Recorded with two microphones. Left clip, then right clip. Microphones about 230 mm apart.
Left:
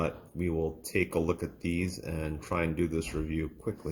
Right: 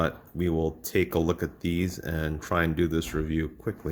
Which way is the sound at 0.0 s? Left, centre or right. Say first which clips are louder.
Right 5 dB; right.